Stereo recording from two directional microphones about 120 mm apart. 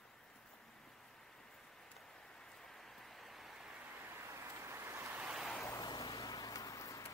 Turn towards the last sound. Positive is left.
turn(degrees=25)  # may be behind; listen again after turning